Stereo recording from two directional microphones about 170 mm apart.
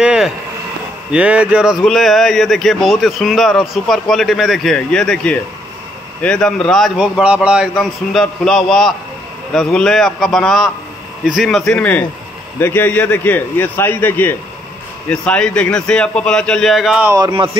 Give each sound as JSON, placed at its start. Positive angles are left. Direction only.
{"t": 0.0, "sound": "vehicle", "side_deg": -5}
{"t": 1.1, "sound": "a man's voice", "side_deg": -10}
{"t": 17.1, "sound": "speech", "side_deg": -25}